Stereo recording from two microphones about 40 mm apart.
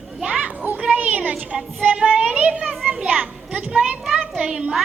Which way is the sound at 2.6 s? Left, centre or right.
Centre.